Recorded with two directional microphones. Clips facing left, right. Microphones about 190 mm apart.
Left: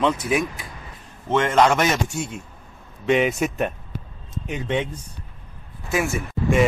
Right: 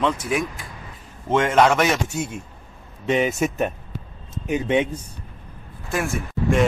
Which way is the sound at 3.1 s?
Centre (ahead or behind).